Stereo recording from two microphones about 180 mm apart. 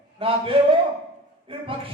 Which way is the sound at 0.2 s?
30° right (ahead or behind).